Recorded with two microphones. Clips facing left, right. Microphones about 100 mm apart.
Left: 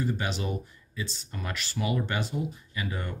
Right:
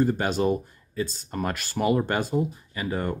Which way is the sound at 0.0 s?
45° right (ahead or behind).